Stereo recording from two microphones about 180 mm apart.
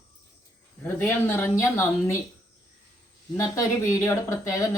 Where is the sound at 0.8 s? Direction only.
10° left (ahead or behind).